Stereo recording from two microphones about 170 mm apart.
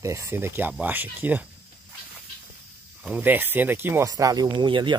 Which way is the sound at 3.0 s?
10° right (ahead or behind).